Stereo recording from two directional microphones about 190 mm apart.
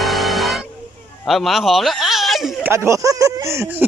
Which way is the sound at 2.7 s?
15° right (ahead or behind).